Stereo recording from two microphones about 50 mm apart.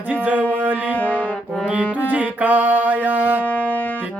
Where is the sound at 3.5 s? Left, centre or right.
Left.